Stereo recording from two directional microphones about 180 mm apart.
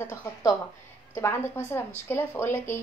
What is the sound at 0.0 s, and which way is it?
A woman's voice, 15° left (ahead or behind).